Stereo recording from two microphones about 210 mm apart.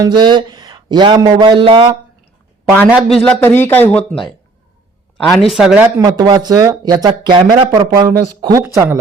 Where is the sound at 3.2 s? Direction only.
10° left (ahead or behind); by 9.0 s 10° right (ahead or behind).